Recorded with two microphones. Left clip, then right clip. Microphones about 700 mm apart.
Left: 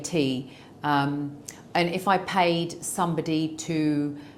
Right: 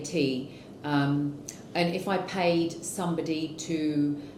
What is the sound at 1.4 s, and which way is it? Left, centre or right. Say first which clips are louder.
A woman's voice: left 7 dB; left.